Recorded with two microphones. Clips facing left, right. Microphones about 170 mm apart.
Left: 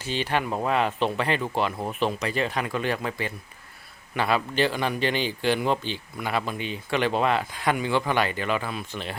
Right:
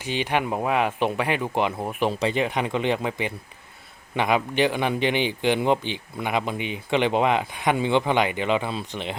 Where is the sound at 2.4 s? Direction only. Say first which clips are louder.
Right 3 dB; 20° right (ahead or behind).